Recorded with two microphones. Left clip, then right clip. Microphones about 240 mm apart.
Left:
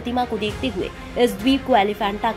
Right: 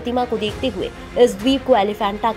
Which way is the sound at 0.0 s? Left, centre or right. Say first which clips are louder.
Right 2 dB; right.